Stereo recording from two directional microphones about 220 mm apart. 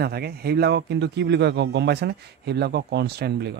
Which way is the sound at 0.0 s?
45° right (ahead or behind).